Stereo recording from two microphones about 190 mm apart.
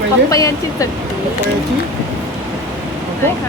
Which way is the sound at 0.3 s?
15° left (ahead or behind).